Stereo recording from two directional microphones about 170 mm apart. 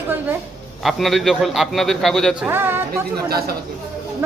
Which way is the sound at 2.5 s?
10° right (ahead or behind).